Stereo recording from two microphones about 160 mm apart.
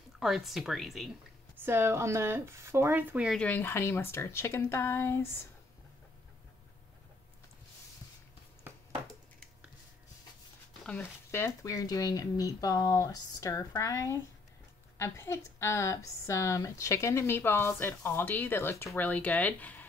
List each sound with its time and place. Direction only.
0.2 s speech: centre (ahead or behind)
1.6 s speech: 15° right (ahead or behind)
3.3 s a woman's voice: 10° left (ahead or behind)
10.8 s a woman's voice: 10° left (ahead or behind)